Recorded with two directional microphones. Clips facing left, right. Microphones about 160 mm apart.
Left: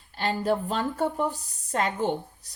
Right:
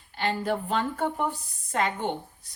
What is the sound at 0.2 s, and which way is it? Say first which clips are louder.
Speech: left 2 dB; 40° left (ahead or behind).